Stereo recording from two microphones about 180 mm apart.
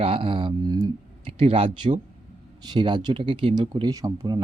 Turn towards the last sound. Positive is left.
turn(degrees=-20)  # may be behind; listen again after turning